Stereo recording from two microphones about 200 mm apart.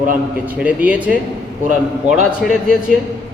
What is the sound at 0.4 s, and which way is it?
Speech, 5° right (ahead or behind).